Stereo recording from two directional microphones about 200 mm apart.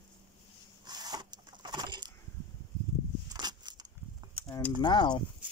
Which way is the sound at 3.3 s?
20° right (ahead or behind).